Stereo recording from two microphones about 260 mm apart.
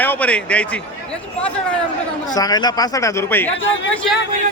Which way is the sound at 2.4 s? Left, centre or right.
Centre.